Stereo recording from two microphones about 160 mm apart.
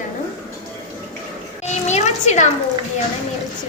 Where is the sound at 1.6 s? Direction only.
45° left (ahead or behind).